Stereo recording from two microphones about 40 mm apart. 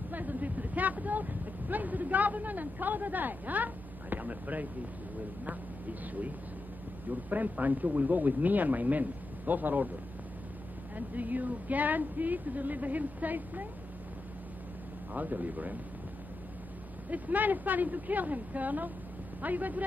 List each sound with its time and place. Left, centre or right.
0.1 s speech: right
7.1 s speech: right
11.0 s speech: right
15.1 s speech: right
17.1 s speech: right